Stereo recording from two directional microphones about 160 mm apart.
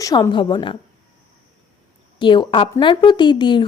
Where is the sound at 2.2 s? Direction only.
30° left (ahead or behind).